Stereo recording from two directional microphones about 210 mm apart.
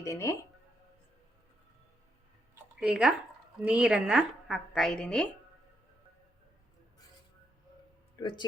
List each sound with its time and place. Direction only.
0.0 s speech: 15° left (ahead or behind)
2.7 s a woman's voice: 5° right (ahead or behind)
8.2 s speech: 20° left (ahead or behind)